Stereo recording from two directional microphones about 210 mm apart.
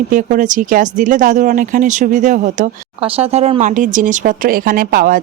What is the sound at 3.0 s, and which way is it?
Speech, 25° right (ahead or behind).